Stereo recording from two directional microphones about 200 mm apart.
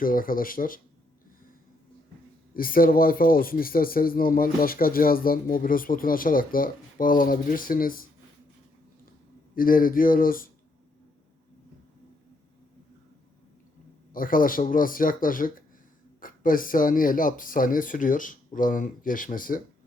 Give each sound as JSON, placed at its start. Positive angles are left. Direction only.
{"t": 0.0, "sound": "speech", "side_deg": 45}
{"t": 2.5, "sound": "speech", "side_deg": 45}
{"t": 9.6, "sound": "speech", "side_deg": 45}
{"t": 14.1, "sound": "speech", "side_deg": 45}